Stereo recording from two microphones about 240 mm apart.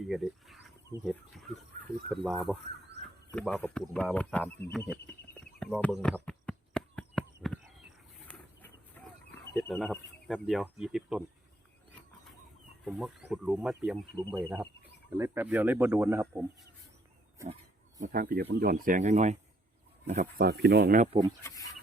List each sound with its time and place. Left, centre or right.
0.0 s a sound: centre
1.0 s speech: centre
5.5 s a sound: centre
8.3 s chicken: centre
12.8 s speech: centre
18.0 s speech: right
21.1 s speech: centre